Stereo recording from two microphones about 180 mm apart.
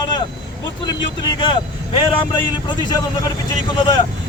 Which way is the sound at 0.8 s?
25° left (ahead or behind).